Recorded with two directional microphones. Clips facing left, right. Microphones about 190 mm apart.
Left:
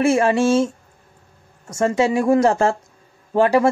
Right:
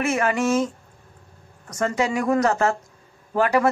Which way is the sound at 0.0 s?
30° left (ahead or behind).